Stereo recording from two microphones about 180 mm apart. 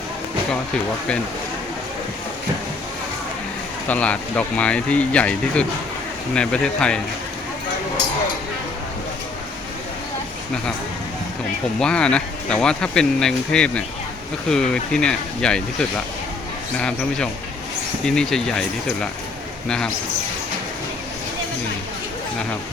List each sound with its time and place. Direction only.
3.8 s speech: 10° left (ahead or behind)
11.8 s speech: 5° left (ahead or behind)
19.6 s speech: 5° left (ahead or behind)